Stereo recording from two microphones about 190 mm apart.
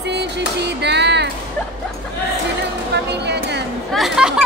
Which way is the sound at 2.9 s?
65° right (ahead or behind).